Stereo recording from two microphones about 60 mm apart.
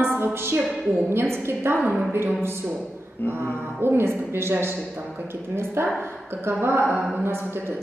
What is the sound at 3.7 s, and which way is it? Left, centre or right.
Music, right.